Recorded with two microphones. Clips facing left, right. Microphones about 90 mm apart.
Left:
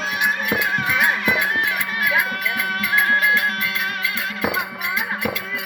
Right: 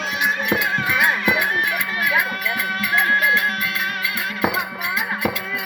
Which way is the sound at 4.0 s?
10° right (ahead or behind).